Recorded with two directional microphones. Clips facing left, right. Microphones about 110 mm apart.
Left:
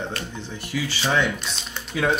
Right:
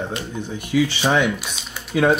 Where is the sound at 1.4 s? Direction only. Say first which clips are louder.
Even; 5° right (ahead or behind).